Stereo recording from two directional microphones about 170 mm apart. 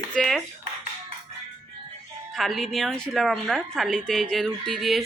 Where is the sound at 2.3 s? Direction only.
Centre (ahead or behind).